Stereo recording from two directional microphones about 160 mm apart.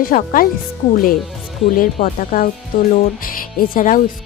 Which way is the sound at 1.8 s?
60° left (ahead or behind).